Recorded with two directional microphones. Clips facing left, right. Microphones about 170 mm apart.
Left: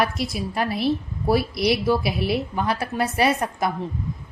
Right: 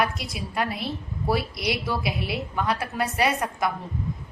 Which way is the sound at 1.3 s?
30° left (ahead or behind).